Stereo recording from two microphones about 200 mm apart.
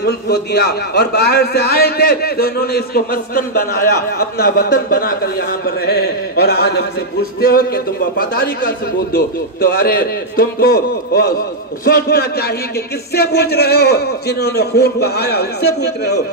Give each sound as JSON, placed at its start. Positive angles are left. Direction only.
{"t": 0.0, "sound": "a man's voice", "side_deg": 55}